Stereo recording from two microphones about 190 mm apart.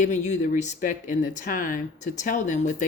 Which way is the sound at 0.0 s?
40° left (ahead or behind).